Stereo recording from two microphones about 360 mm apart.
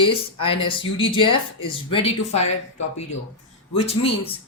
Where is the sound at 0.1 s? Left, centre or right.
Centre.